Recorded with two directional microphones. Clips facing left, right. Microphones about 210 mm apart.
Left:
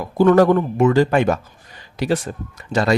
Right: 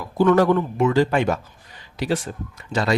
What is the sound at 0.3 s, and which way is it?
Speech, 40° left (ahead or behind).